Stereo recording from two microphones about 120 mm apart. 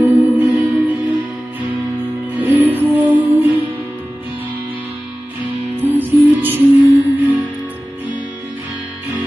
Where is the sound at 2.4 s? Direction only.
15° right (ahead or behind).